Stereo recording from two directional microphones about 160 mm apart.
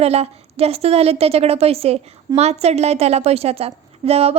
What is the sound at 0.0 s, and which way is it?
A woman's voice, 40° right (ahead or behind).